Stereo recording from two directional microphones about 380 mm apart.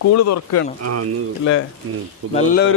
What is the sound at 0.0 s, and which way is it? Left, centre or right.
Speech, left.